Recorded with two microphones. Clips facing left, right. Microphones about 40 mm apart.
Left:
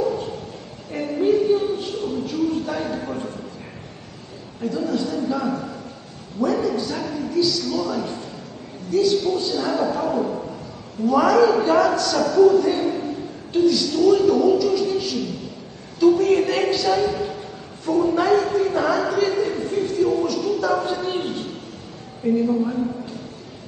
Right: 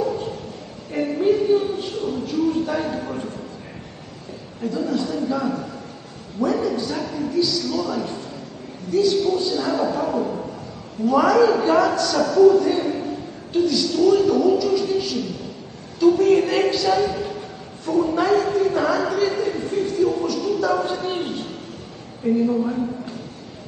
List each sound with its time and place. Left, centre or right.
0.0 s bow-wow: centre
0.9 s a sound: centre
4.6 s a man's voice: centre
22.2 s a man's voice: centre